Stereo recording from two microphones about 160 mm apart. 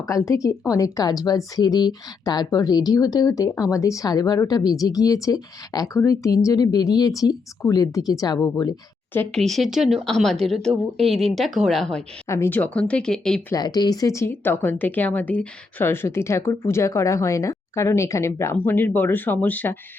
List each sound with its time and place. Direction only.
0.3 s speech: 20° left (ahead or behind)
9.1 s speech: 5° left (ahead or behind)
12.3 s speech: 15° left (ahead or behind)
13.5 s speech: 25° left (ahead or behind)